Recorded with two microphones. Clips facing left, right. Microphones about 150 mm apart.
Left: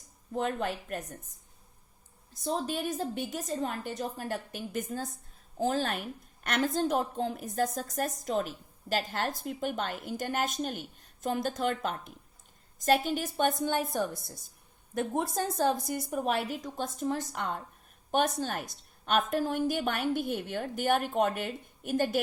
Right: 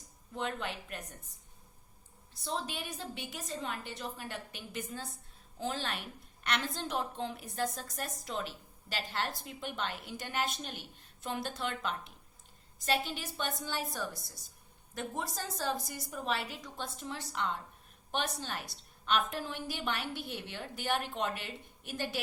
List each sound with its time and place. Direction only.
0.3 s a woman's voice: 45° left (ahead or behind)
2.3 s a woman's voice: 45° left (ahead or behind)